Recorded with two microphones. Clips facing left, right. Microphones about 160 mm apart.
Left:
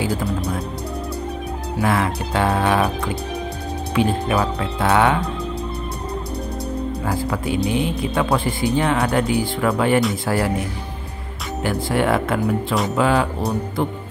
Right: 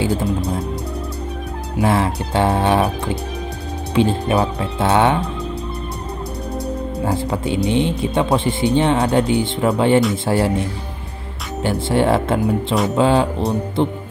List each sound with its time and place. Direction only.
0.0 s music: 25° right (ahead or behind)
1.8 s speech: 30° right (ahead or behind)
3.9 s speech: 25° right (ahead or behind)
7.1 s speech: 25° right (ahead or behind)
11.6 s speech: 30° right (ahead or behind)